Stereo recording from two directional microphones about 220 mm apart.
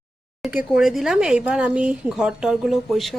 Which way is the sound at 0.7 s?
Centre (ahead or behind).